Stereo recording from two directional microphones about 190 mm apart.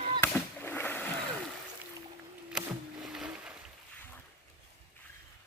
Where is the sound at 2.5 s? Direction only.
Centre (ahead or behind).